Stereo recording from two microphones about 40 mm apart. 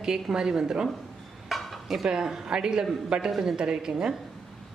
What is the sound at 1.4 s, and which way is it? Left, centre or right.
Dishes, centre.